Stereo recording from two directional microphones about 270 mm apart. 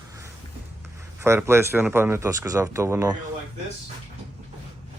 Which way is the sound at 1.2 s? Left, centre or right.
Centre.